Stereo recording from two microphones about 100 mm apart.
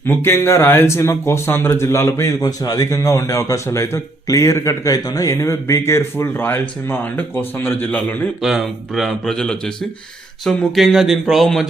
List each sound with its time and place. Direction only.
0.0 s speech: 25° left (ahead or behind)
8.4 s speech: 5° right (ahead or behind)